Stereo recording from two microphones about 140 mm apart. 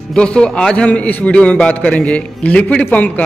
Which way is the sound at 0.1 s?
5° left (ahead or behind).